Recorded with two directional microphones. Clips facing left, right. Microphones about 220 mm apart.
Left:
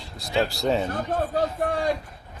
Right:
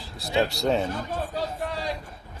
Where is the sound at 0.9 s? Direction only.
45° left (ahead or behind).